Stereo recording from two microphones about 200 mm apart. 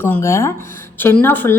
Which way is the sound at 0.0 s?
10° left (ahead or behind).